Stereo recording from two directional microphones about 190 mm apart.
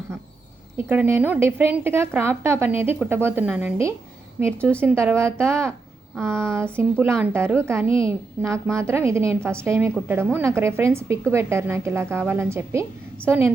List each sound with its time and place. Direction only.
0.8 s a woman's voice: 10° right (ahead or behind)
7.9 s a woman's voice: 30° left (ahead or behind)
8.4 s a woman's voice: 10° right (ahead or behind)